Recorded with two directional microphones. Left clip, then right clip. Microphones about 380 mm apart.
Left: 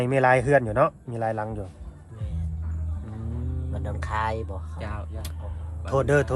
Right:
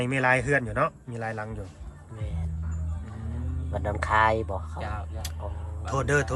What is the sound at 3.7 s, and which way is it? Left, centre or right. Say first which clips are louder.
Speech: right 6 dB; centre.